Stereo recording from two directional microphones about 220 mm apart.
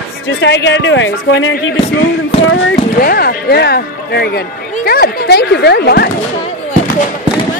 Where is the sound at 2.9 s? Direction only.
40° left (ahead or behind).